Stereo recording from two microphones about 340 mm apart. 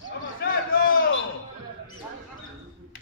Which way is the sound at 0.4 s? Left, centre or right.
Left.